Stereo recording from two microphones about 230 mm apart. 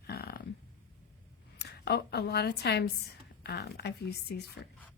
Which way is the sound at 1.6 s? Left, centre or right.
Left.